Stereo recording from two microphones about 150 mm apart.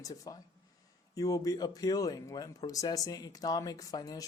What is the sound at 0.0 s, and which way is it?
Speech, 25° left (ahead or behind).